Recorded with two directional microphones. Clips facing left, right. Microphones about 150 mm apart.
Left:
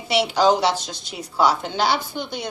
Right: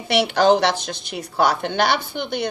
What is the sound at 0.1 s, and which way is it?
A woman's voice, 60° right (ahead or behind).